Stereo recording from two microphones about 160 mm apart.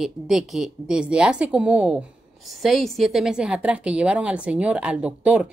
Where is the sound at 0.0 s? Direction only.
5° right (ahead or behind).